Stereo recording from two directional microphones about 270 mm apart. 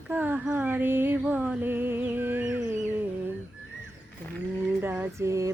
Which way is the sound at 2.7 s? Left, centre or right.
Centre.